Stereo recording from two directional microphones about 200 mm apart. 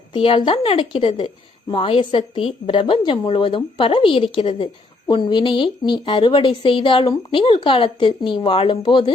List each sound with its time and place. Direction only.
0.1 s a woman's voice: 25° left (ahead or behind)